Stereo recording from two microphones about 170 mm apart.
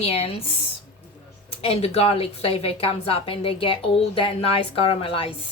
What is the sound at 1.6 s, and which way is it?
A woman's voice, 35° left (ahead or behind).